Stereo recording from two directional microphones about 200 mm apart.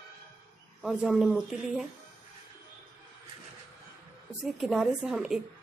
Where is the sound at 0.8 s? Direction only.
Centre (ahead or behind).